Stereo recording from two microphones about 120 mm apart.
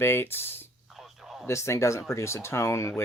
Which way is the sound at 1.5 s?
25° left (ahead or behind).